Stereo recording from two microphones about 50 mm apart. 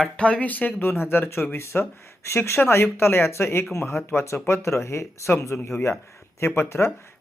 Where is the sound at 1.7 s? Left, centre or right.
Left.